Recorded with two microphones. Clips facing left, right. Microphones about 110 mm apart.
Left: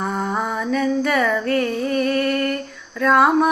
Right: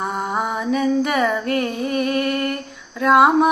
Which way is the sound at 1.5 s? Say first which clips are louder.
Left 1 dB; 20° right (ahead or behind).